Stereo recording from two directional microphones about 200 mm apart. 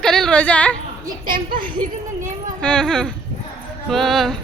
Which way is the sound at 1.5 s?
25° right (ahead or behind).